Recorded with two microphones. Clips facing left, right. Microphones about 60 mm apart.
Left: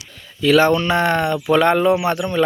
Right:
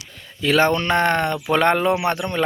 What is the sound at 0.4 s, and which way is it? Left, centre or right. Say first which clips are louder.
Speech: left 3 dB; right.